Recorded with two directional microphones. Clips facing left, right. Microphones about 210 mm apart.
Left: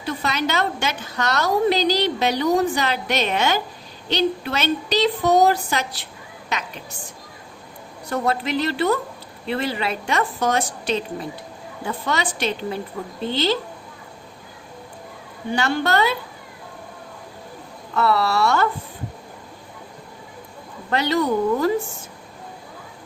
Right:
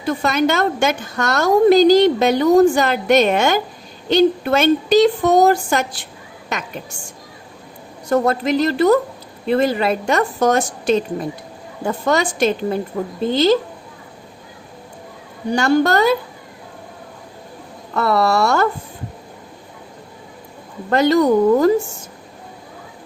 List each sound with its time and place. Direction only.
0.0 s a woman's voice: 45° right (ahead or behind)
8.1 s a woman's voice: 45° right (ahead or behind)
15.4 s a woman's voice: 45° right (ahead or behind)
17.9 s a woman's voice: 45° right (ahead or behind)
20.9 s a woman's voice: 45° right (ahead or behind)